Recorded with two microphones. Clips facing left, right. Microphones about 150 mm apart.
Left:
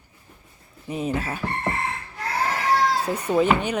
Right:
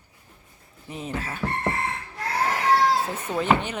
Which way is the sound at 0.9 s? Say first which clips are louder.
Left 6 dB; 15° left (ahead or behind).